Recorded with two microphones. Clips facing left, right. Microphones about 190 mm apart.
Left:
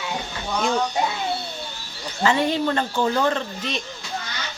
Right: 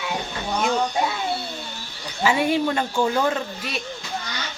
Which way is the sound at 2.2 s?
10° right (ahead or behind).